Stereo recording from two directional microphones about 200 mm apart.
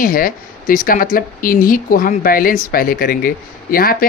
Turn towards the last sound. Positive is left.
turn(degrees=45)  # may be behind; listen again after turning